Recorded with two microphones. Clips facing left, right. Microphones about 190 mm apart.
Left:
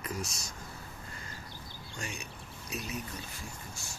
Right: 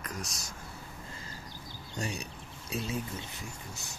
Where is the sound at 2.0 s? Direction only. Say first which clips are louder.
Right 6 dB; 35° right (ahead or behind); by 3.9 s 20° right (ahead or behind).